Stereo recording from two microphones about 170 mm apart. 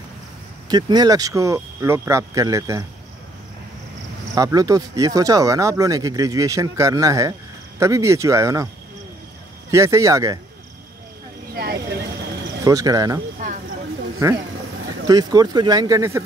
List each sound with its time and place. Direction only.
0.7 s speech: 25° right (ahead or behind)
4.4 s speech: 20° right (ahead or behind)
9.7 s speech: 15° right (ahead or behind)
11.5 s vehicle: 65° right (ahead or behind)
12.6 s speech: 20° right (ahead or behind)
15.0 s speech: 20° right (ahead or behind)